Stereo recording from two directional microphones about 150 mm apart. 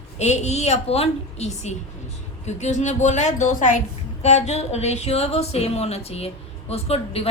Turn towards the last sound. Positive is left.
turn(degrees=40)  # may be behind; listen again after turning